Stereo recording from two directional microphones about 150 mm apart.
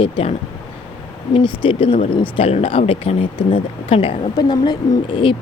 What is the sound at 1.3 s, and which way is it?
Speech, 35° left (ahead or behind).